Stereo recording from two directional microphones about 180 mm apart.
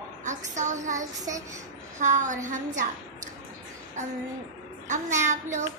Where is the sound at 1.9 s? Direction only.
45° right (ahead or behind).